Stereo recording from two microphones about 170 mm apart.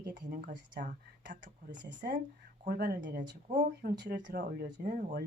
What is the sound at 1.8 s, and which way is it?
Speech, 90° right.